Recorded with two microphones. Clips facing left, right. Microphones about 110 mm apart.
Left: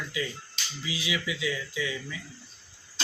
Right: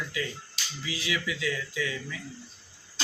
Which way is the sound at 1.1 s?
10° left (ahead or behind).